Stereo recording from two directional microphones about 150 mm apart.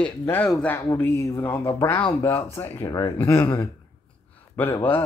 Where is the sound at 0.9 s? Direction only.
20° left (ahead or behind).